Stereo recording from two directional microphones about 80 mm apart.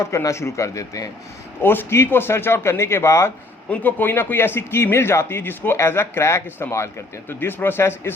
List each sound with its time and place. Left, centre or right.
0.0 s speech: left
1.6 s speech: left
3.7 s speech: left